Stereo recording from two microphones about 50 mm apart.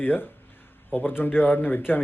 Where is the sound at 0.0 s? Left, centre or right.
Left.